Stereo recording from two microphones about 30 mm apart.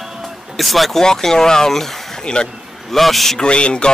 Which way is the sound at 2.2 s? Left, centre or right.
Left.